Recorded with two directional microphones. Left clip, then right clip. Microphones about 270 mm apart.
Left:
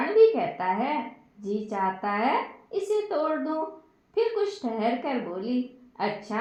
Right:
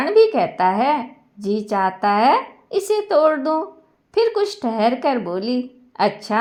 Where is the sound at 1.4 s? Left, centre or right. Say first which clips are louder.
Right 9 dB; right.